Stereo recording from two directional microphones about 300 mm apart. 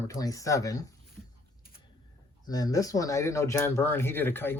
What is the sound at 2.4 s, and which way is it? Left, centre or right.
Speech, centre.